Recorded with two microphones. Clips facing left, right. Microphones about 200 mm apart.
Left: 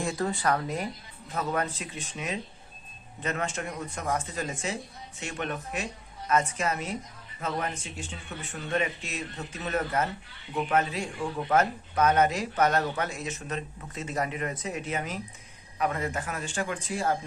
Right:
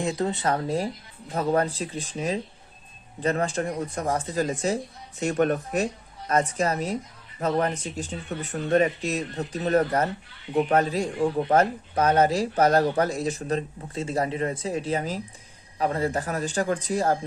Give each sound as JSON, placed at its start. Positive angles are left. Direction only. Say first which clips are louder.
{"t": 0.0, "sound": "speech", "louder": "right 3 dB", "side_deg": -20}